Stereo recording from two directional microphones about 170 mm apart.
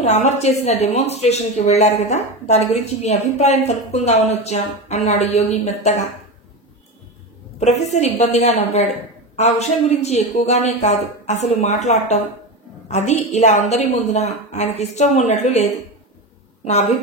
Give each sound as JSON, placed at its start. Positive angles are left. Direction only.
{"t": 0.0, "sound": "a woman's voice", "side_deg": 40}
{"t": 7.6, "sound": "a woman's voice", "side_deg": 40}